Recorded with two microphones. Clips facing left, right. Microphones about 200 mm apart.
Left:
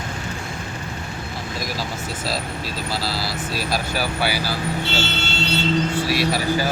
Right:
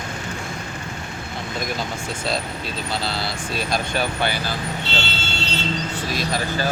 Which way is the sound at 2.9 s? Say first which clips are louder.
Even; 5° left (ahead or behind).